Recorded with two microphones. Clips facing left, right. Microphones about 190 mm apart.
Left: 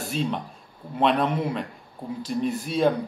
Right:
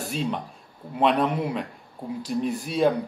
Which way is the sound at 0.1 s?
5° right (ahead or behind).